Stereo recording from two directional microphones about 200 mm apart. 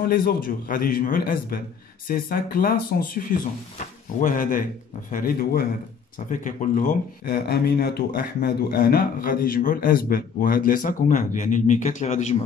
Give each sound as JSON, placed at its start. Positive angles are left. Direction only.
{"t": 0.0, "sound": "speech", "side_deg": 50}